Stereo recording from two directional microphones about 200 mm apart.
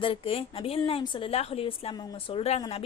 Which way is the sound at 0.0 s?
25° left (ahead or behind).